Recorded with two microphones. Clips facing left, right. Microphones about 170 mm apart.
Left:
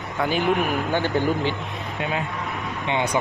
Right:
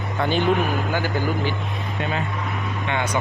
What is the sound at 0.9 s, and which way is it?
Speech, 25° left (ahead or behind).